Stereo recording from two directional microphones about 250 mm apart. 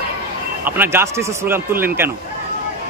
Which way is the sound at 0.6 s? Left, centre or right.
Centre.